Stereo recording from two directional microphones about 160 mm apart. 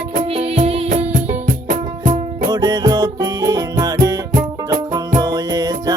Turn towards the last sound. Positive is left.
turn(degrees=-25)  # may be behind; listen again after turning